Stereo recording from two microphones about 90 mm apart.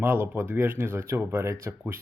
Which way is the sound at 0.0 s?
25° right (ahead or behind).